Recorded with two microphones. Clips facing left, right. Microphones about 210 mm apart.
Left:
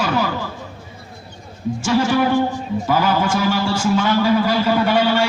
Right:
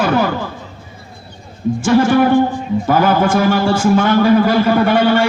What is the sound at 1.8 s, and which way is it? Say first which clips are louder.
Speech: right 5 dB; 55° right (ahead or behind).